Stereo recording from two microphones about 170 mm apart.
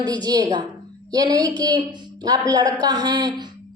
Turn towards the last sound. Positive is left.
turn(degrees=-25)  # may be behind; listen again after turning